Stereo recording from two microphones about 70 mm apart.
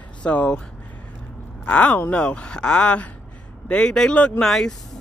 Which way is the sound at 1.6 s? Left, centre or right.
Centre.